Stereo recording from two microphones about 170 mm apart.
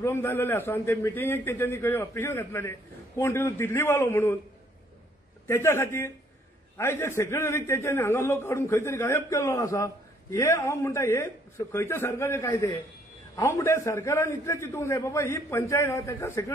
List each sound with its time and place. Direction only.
0.0 s a man's voice: 15° left (ahead or behind)
5.5 s a man's voice: 15° left (ahead or behind)